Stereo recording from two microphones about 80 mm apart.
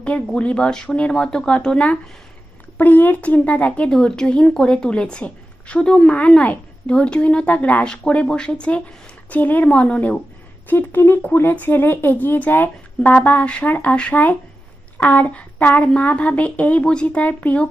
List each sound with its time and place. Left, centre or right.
0.3 s speech: centre
10.7 s speech: left